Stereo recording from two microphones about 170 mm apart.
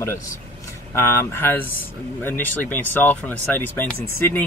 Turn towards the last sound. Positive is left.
turn(degrees=15)  # may be behind; listen again after turning